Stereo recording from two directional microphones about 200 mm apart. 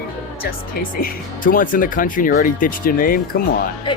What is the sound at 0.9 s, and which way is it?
Speech, 45° left (ahead or behind).